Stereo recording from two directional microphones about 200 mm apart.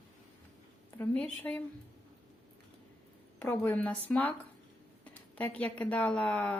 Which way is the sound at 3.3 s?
10° left (ahead or behind).